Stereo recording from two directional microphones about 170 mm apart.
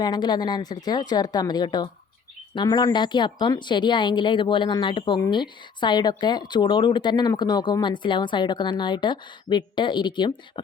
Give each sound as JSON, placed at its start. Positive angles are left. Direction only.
{"t": 0.0, "sound": "speech", "side_deg": 25}